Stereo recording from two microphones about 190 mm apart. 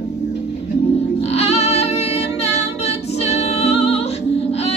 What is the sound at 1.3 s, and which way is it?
Music, 35° left (ahead or behind).